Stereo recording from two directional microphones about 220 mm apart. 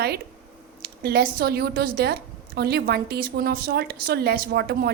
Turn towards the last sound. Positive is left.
turn(degrees=-45)  # may be behind; listen again after turning